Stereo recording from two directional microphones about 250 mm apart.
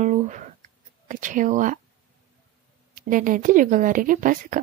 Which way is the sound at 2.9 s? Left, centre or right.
Right.